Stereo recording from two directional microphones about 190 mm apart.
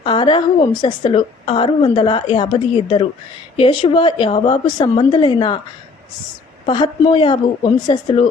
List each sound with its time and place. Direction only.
0.0 s a woman's voice: 25° left (ahead or behind)
6.7 s a woman's voice: 25° left (ahead or behind)